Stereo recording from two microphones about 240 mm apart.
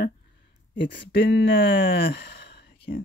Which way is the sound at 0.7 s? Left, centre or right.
Left.